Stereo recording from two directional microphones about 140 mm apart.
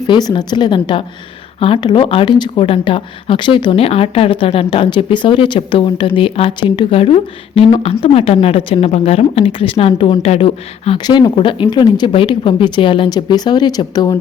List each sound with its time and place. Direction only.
0.1 s speech: 30° left (ahead or behind)